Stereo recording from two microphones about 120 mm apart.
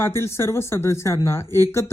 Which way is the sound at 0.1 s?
20° left (ahead or behind).